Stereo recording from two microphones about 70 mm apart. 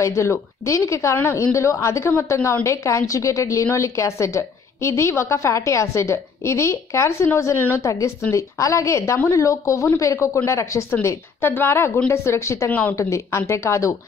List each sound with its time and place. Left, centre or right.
0.0 s a woman's voice: left